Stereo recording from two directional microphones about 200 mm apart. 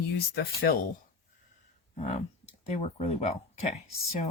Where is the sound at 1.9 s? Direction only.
35° left (ahead or behind).